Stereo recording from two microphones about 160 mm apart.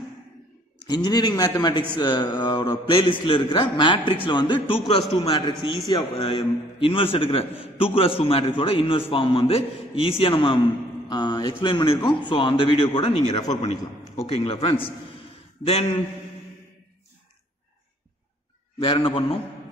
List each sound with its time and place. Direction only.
0.8 s a man's voice: 25° left (ahead or behind)
18.8 s a man's voice: 35° left (ahead or behind)